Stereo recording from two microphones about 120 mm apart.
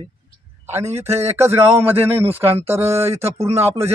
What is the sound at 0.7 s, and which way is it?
Speech, 20° right (ahead or behind).